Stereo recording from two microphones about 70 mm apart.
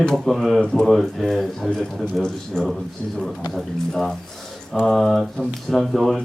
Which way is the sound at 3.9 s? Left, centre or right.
Centre.